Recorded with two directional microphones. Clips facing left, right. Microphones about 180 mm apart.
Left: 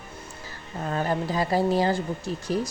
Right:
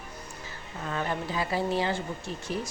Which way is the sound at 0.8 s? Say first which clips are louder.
Left 5 dB; 40° left (ahead or behind).